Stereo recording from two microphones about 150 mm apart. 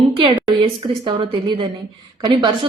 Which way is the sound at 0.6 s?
35° right (ahead or behind).